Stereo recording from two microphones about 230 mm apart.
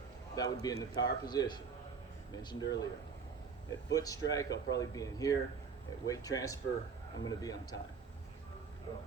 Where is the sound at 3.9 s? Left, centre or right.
Centre.